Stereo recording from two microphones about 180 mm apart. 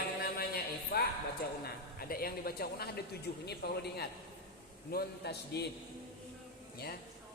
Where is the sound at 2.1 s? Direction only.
55° left (ahead or behind).